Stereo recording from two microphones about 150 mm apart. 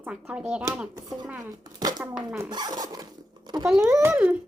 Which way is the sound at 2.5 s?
30° right (ahead or behind).